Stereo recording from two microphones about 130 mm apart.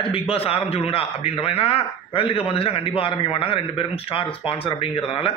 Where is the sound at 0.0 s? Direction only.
45° left (ahead or behind).